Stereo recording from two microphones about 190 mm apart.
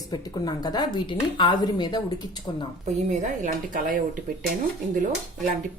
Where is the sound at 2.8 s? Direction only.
40° right (ahead or behind).